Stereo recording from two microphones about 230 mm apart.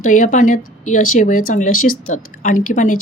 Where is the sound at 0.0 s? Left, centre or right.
Left.